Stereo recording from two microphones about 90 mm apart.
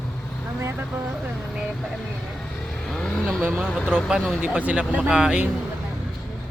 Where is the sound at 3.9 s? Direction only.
5° right (ahead or behind).